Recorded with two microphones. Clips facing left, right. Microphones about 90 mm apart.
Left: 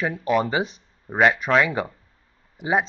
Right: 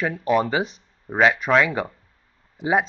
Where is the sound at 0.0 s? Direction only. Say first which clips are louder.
Right 1 dB; 5° left (ahead or behind).